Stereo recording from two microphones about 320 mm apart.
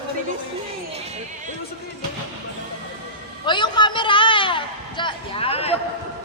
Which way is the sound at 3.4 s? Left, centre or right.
Centre.